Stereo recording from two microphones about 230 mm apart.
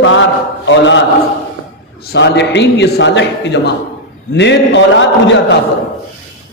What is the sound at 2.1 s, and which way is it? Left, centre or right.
A man's voice, left.